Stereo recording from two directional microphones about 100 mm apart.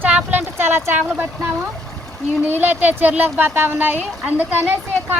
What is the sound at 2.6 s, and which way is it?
A woman's voice, 20° right (ahead or behind).